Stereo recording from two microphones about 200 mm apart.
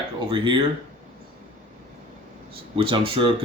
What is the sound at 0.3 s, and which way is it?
Speech, 25° right (ahead or behind).